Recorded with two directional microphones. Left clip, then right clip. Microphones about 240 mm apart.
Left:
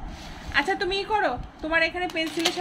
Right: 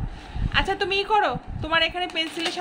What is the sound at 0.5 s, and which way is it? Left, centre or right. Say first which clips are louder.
A woman's voice: right 1 dB; centre.